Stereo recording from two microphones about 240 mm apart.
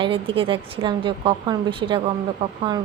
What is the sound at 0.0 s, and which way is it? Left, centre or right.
Speech, right.